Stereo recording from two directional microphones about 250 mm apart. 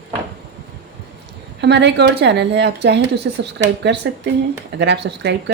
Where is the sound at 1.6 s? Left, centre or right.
Right.